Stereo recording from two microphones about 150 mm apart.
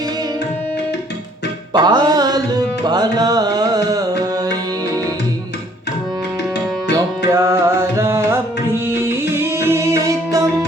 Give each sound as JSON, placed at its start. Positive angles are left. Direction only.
{"t": 1.7, "sound": "music", "side_deg": -30}
{"t": 6.9, "sound": "music", "side_deg": -20}